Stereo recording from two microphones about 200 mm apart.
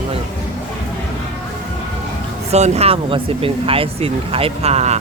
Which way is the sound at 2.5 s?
30° right (ahead or behind).